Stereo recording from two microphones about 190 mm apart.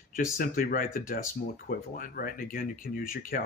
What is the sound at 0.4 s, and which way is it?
Speech, 50° left (ahead or behind).